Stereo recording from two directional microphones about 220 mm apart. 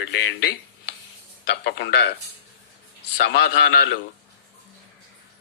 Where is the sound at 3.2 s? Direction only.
45° left (ahead or behind).